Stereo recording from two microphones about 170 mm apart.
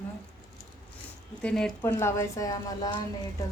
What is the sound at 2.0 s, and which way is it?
A woman's voice, 15° left (ahead or behind).